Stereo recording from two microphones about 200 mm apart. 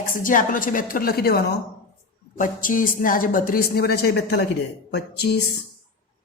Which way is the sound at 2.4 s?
40° left (ahead or behind).